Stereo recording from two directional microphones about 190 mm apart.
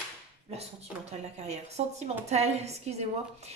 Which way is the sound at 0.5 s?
35° right (ahead or behind).